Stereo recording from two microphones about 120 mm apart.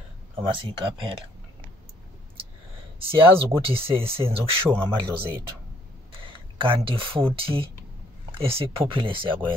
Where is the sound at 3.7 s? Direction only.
50° right (ahead or behind).